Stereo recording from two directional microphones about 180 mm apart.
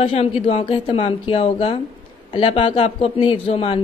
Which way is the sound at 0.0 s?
30° left (ahead or behind).